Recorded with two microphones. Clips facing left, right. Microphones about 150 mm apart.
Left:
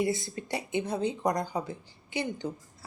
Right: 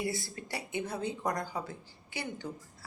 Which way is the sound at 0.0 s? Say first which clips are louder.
Left 6 dB; 20° left (ahead or behind).